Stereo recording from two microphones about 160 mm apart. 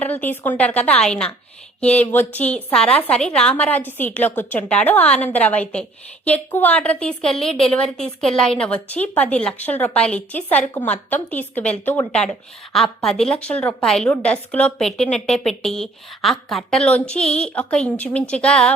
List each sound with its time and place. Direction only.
0.0 s a woman's voice: 10° left (ahead or behind)